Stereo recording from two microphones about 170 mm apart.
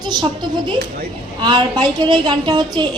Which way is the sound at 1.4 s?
25° right (ahead or behind).